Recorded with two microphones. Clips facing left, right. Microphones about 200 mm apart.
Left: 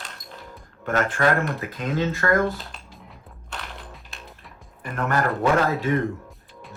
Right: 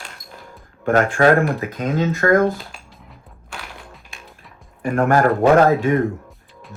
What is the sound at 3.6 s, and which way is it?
Typewriter, 5° right (ahead or behind).